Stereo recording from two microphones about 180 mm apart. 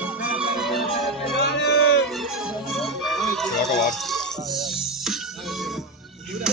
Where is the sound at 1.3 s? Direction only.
70° left (ahead or behind).